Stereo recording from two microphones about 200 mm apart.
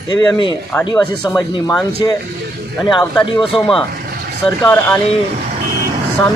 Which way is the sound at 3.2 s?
25° left (ahead or behind).